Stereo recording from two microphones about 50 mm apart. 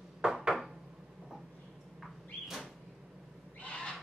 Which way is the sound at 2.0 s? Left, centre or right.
Centre.